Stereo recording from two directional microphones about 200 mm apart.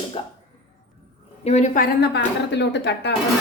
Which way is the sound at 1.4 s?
35° left (ahead or behind).